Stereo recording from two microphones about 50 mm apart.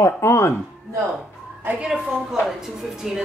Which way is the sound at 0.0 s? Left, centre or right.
Left.